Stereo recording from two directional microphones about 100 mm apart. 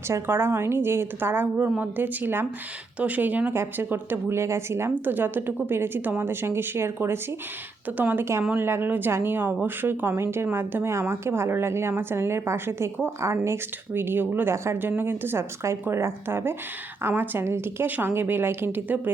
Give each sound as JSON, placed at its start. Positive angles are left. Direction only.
{"t": 0.1, "sound": "speech", "side_deg": -25}